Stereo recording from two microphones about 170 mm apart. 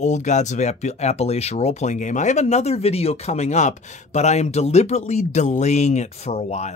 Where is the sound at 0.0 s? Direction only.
45° left (ahead or behind).